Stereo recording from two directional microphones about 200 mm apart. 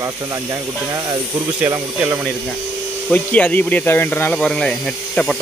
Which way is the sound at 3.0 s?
10° left (ahead or behind).